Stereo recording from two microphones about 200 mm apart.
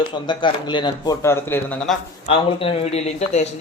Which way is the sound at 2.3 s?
30° left (ahead or behind).